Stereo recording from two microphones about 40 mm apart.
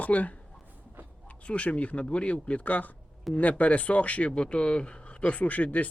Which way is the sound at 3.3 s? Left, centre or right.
Centre.